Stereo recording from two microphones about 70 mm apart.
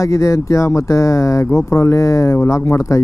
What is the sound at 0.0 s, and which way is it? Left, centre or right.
Speech, left.